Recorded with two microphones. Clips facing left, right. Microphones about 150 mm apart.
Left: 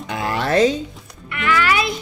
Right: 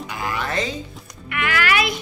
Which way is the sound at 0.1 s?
70° left (ahead or behind).